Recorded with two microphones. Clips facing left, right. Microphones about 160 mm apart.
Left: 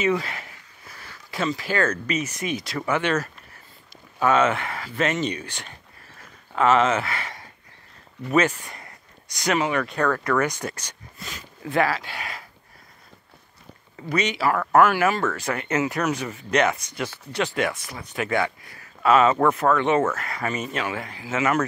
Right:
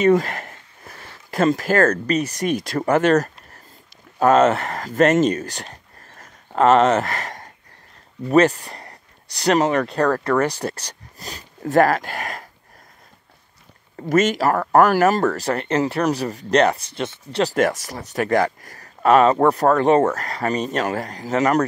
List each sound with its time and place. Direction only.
0.0 s speech: 45° right (ahead or behind)
13.9 s speech: 45° right (ahead or behind); by 17.5 s 30° right (ahead or behind)
17.6 s speech: 40° right (ahead or behind)